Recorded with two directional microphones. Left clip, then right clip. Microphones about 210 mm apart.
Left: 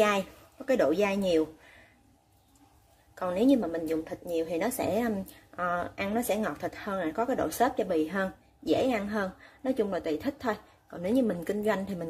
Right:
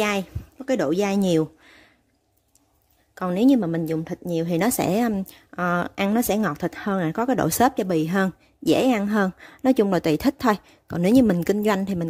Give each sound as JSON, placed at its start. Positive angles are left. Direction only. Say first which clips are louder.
{"t": 0.0, "sound": "speech", "louder": "right 1 dB", "side_deg": -40}
{"t": 3.2, "sound": "a woman's voice", "louder": "right 5 dB", "side_deg": -50}